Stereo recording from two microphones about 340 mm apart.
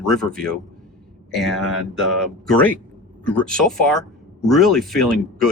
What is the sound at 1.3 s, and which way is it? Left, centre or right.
Speech, centre.